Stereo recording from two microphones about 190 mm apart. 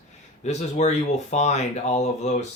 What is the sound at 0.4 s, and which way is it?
Speech, 35° left (ahead or behind).